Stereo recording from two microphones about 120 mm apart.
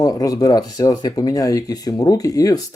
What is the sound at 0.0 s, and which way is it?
Speech, 30° left (ahead or behind).